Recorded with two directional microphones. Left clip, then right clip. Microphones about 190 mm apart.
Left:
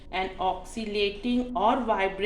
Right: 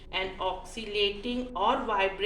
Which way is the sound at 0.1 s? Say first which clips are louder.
Left 3 dB; 50° left (ahead or behind).